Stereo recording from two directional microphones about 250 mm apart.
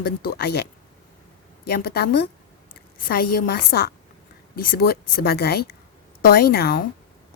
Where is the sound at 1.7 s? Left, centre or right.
Left.